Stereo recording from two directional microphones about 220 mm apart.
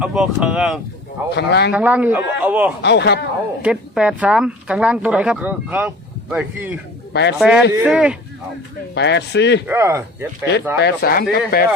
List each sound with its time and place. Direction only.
0.0 s speech: 5° right (ahead or behind)
1.3 s speech: 50° left (ahead or behind)
1.7 s speech: 5° right (ahead or behind)
2.8 s speech: 50° left (ahead or behind)
3.6 s speech: 5° right (ahead or behind)
7.1 s speech: 50° left (ahead or behind)
7.3 s speech: 5° right (ahead or behind)
9.0 s speech: 50° left (ahead or behind)
9.6 s speech: 10° right (ahead or behind)
10.8 s speech: 45° left (ahead or behind)